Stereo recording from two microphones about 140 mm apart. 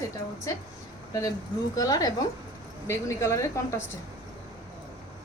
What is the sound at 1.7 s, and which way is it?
Speech, 25° left (ahead or behind).